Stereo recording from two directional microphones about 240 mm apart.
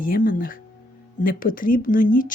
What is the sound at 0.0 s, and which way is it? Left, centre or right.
Speech, left.